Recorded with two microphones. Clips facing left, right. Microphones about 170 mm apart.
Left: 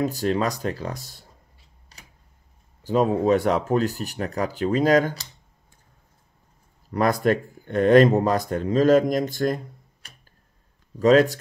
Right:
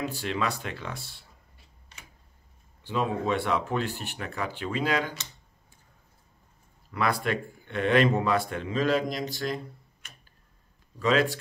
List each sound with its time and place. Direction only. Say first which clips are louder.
0.0 s speech: left 7 dB; 40° left (ahead or behind)
1.9 s a sound: left 1 dB; 35° left (ahead or behind)
2.8 s speech: left 8 dB; 40° left (ahead or behind)
6.9 s speech: left 7 dB; 40° left (ahead or behind)
10.0 s tick-tock: left 1 dB; 35° left (ahead or behind)
11.0 s speech: left 8 dB; 40° left (ahead or behind)